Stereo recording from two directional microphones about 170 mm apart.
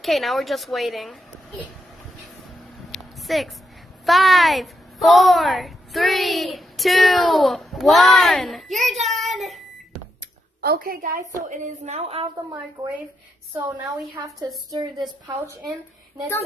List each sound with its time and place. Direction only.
0.0 s a woman's voice: centre (ahead or behind)
2.9 s a sound: centre (ahead or behind)
4.0 s a woman's voice: centre (ahead or behind)
10.6 s a woman's voice: 60° right (ahead or behind)
11.4 s a woman's voice: 45° right (ahead or behind)
14.7 s a woman's voice: 25° right (ahead or behind)